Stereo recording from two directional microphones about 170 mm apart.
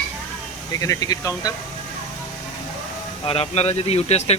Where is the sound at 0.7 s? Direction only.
20° left (ahead or behind).